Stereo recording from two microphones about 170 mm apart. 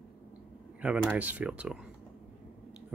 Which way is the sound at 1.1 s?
10° right (ahead or behind).